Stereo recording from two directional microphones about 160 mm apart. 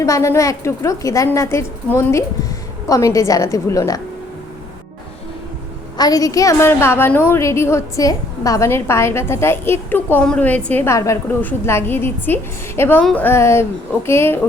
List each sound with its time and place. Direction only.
0.0 s a woman's voice: 20° left (ahead or behind)
6.0 s a woman's voice: 25° left (ahead or behind)